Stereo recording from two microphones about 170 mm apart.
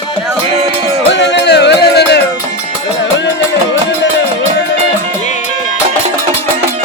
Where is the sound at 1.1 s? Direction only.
90° left.